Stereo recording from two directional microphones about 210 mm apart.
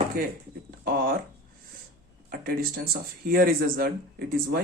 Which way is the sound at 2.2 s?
45° right (ahead or behind).